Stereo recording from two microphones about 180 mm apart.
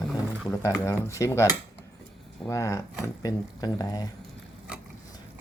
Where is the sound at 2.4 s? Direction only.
15° left (ahead or behind).